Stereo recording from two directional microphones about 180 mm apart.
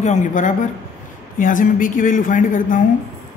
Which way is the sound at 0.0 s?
40° left (ahead or behind).